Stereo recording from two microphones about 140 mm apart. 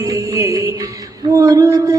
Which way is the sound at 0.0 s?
20° right (ahead or behind).